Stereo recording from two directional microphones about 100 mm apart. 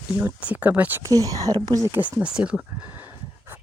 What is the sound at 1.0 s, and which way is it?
Speech, 35° right (ahead or behind).